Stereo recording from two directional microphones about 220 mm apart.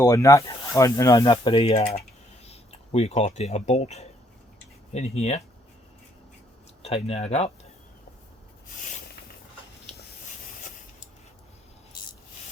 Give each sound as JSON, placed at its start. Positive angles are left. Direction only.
{"t": 0.0, "sound": "speech", "side_deg": 15}
{"t": 6.8, "sound": "speech", "side_deg": 30}